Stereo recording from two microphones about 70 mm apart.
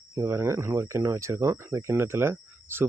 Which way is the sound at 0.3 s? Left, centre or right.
Right.